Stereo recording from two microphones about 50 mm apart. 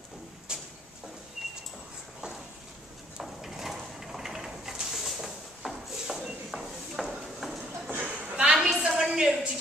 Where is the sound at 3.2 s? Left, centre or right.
Centre.